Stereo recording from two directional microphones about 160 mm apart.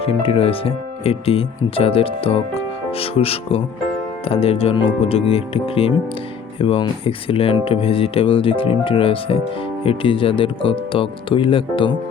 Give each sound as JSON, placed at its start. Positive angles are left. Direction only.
{"t": 0.0, "sound": "speech", "side_deg": 35}